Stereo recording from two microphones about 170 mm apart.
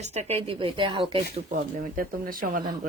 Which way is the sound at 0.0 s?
40° right (ahead or behind).